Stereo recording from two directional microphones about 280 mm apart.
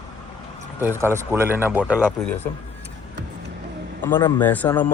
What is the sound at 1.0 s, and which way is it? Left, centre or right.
Speech, centre.